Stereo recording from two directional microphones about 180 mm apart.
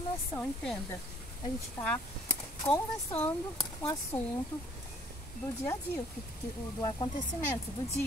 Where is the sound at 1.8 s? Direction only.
15° left (ahead or behind).